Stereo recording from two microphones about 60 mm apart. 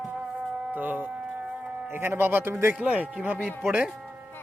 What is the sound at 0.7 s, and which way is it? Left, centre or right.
Speech, right.